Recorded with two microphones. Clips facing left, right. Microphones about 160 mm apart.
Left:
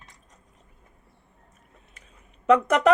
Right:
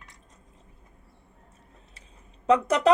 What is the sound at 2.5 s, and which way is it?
Speech, 35° right (ahead or behind).